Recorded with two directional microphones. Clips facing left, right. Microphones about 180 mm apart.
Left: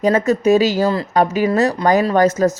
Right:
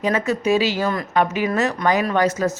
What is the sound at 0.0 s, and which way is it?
Speech, 40° left (ahead or behind).